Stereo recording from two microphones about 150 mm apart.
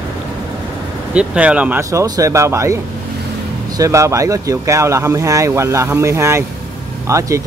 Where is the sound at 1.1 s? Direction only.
10° right (ahead or behind).